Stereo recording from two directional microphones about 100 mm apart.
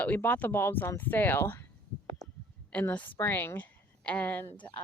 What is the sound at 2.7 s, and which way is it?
A woman's voice, 15° left (ahead or behind).